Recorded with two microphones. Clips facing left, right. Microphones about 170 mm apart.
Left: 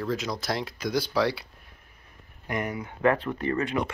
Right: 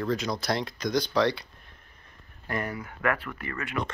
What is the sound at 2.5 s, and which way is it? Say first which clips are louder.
Speech: left 2 dB; 20° left (ahead or behind).